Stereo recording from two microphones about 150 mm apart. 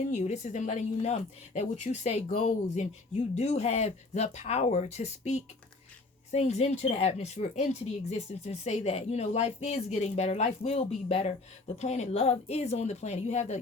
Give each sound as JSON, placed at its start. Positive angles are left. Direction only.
{"t": 0.1, "sound": "speech", "side_deg": 50}